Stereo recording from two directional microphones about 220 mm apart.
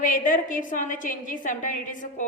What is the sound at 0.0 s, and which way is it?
A woman's voice, 35° left (ahead or behind).